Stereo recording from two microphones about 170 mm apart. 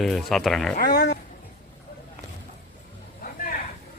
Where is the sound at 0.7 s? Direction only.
65° left (ahead or behind).